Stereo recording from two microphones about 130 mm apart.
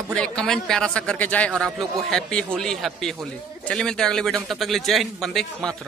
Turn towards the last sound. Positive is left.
turn(degrees=5)  # may be behind; listen again after turning